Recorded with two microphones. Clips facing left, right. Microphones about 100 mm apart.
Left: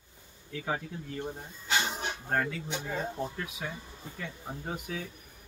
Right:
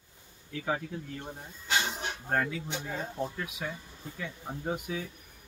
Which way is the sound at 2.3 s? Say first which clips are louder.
Right 1 dB; centre (ahead or behind).